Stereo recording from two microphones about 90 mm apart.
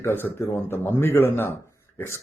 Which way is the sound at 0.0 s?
25° left (ahead or behind).